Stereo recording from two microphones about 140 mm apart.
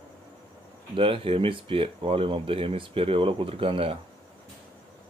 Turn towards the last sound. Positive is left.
turn(degrees=-40)  # may be behind; listen again after turning